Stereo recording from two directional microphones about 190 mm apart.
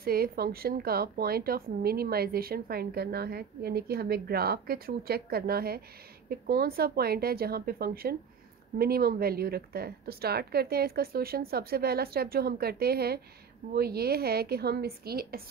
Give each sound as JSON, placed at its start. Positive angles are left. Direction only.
{"t": 0.0, "sound": "a woman's voice", "side_deg": -55}